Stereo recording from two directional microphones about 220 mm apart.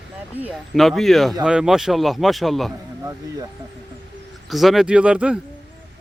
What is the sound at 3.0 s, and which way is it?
Speech, 15° right (ahead or behind).